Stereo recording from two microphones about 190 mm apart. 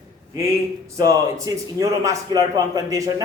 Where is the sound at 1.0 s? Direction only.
20° right (ahead or behind).